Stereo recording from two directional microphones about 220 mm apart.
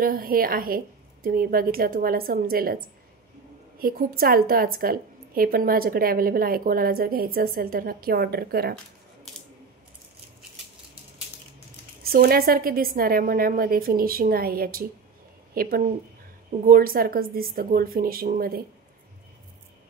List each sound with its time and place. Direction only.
0.0 s a woman's voice: 40° right (ahead or behind)
12.0 s a woman's voice: 45° right (ahead or behind)